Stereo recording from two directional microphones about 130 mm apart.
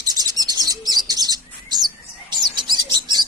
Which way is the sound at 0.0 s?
30° right (ahead or behind).